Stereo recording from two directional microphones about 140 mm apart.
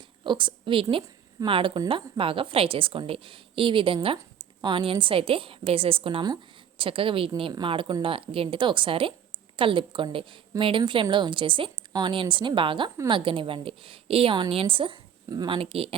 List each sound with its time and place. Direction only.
0.3 s a woman's voice: 35° right (ahead or behind)